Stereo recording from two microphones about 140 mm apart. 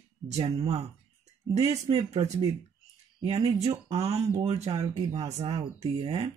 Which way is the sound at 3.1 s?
40° right (ahead or behind).